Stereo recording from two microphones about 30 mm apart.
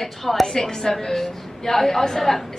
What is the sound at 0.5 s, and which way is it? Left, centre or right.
A woman's voice, centre.